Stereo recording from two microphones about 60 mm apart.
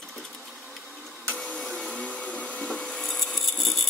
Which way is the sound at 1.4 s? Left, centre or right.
Centre.